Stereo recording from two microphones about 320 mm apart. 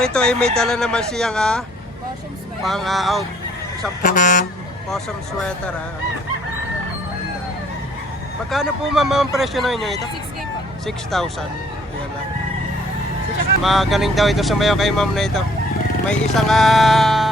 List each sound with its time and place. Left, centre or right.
0.0 s speech: centre
2.6 s speech: centre
4.0 s speech: left
8.4 s speech: centre
13.6 s speech: centre